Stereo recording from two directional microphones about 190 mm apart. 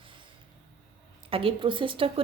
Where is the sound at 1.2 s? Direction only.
30° right (ahead or behind).